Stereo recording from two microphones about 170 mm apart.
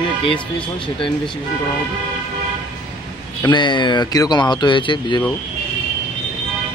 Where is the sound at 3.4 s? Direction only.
30° left (ahead or behind).